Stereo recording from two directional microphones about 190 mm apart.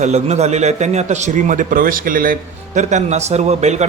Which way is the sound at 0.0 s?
35° right (ahead or behind).